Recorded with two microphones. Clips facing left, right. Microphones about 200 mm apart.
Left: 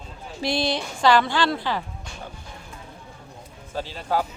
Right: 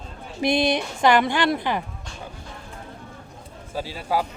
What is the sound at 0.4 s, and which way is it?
A woman's voice, 20° right (ahead or behind).